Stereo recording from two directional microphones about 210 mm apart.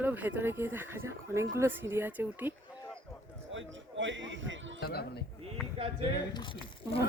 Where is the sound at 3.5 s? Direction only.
60° right (ahead or behind).